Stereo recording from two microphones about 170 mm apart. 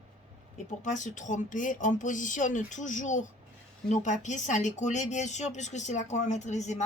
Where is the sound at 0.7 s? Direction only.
45° left (ahead or behind).